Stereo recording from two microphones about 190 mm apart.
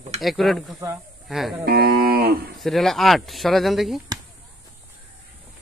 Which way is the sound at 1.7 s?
55° right (ahead or behind).